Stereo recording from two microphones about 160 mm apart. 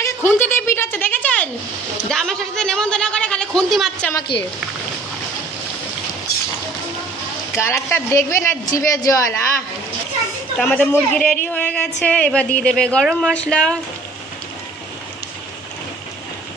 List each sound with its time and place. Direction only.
0.0 s a woman's voice: 15° left (ahead or behind)
4.1 s a woman's voice: 25° left (ahead or behind)
7.5 s a woman's voice: 15° left (ahead or behind)
10.6 s a woman's voice: 10° left (ahead or behind)